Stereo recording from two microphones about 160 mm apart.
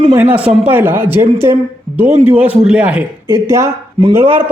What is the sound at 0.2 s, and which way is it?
A man's voice, 10° right (ahead or behind).